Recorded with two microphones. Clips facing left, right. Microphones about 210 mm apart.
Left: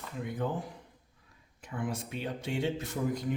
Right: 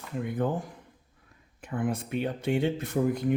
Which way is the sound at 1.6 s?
55° right (ahead or behind).